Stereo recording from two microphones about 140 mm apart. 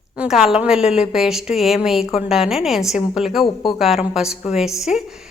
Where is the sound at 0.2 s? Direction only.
5° right (ahead or behind).